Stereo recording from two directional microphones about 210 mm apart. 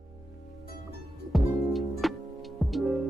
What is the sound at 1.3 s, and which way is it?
Music, centre (ahead or behind).